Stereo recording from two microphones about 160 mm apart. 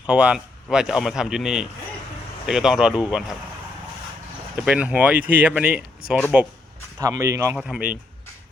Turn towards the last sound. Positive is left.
turn(degrees=-5)  # may be behind; listen again after turning